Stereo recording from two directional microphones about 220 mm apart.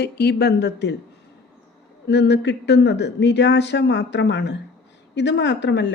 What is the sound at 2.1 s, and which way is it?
Speech, 50° left (ahead or behind).